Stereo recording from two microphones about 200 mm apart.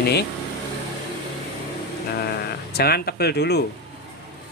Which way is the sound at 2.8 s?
50° left (ahead or behind).